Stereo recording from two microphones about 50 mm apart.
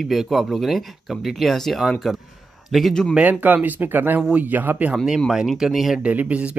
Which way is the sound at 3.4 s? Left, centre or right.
Right.